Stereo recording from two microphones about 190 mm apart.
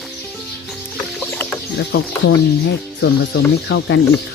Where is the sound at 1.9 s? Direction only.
55° left (ahead or behind).